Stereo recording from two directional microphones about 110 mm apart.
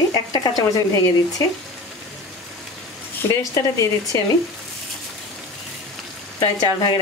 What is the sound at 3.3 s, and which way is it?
Speech, 30° left (ahead or behind).